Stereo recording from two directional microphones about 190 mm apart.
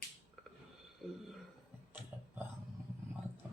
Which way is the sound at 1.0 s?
Centre (ahead or behind).